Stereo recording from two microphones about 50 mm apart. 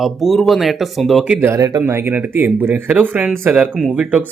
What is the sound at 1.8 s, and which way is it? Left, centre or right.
Speech, right.